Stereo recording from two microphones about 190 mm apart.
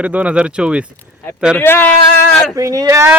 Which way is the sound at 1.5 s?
10° left (ahead or behind).